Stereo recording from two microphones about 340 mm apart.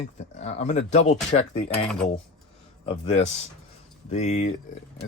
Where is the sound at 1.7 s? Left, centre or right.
Centre.